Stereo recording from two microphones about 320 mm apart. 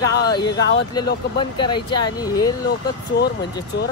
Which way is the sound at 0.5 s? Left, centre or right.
Left.